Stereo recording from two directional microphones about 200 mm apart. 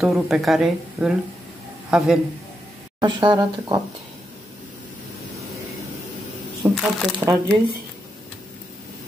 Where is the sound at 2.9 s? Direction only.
20° right (ahead or behind).